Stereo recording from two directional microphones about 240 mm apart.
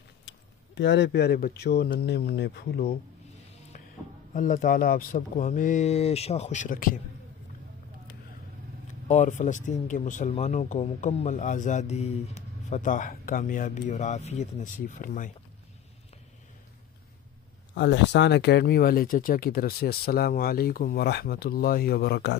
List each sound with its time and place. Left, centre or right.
0.7 s speech: left
4.3 s speech: left
9.0 s speech: left
17.7 s speech: left